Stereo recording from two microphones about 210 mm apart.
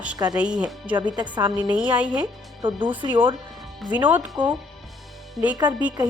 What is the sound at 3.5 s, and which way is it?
Speech, 5° right (ahead or behind).